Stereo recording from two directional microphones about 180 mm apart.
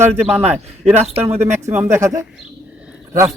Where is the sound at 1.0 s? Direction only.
35° right (ahead or behind).